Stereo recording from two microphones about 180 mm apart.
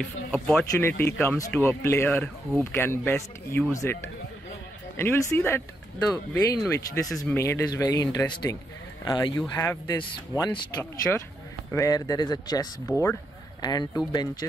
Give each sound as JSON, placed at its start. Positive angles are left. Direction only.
{"t": 0.0, "sound": "speech", "side_deg": 5}
{"t": 9.6, "sound": "speech", "side_deg": 10}
{"t": 9.9, "sound": "speech", "side_deg": 25}
{"t": 10.8, "sound": "speech", "side_deg": 15}